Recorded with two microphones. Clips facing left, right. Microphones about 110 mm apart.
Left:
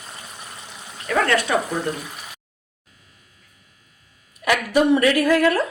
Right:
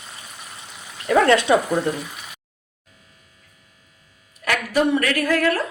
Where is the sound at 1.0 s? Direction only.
25° right (ahead or behind).